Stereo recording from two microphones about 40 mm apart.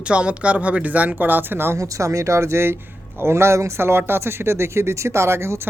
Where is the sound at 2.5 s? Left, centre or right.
Right.